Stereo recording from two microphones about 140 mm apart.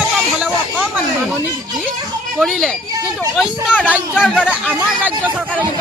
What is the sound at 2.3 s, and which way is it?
Speech, centre (ahead or behind).